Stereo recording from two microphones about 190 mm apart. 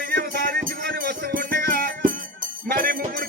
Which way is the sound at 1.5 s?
55° right (ahead or behind).